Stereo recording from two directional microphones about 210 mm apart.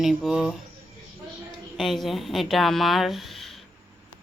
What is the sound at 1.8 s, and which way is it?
Speech, centre (ahead or behind).